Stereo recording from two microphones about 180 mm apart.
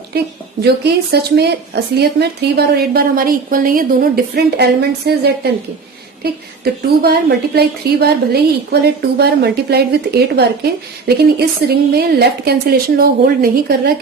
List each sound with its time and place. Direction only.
0.6 s a woman's voice: 65° right (ahead or behind)
7.0 s a woman's voice: 60° right (ahead or behind)